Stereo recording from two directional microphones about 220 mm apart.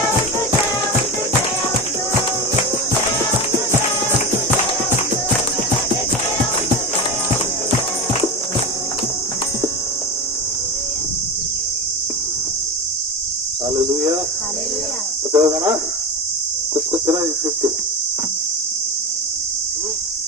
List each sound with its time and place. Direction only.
15.3 s cricket: 15° right (ahead or behind)